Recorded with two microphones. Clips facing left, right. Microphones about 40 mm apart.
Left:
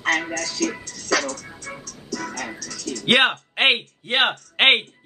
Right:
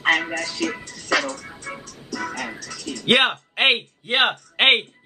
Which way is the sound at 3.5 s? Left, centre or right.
Centre.